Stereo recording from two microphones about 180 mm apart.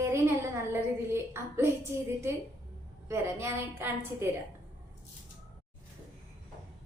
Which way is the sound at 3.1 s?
15° right (ahead or behind).